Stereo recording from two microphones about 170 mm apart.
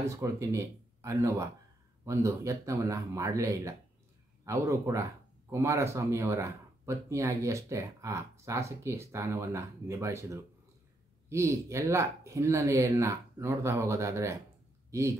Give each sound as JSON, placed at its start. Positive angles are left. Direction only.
{"t": 0.0, "sound": "speech", "side_deg": -20}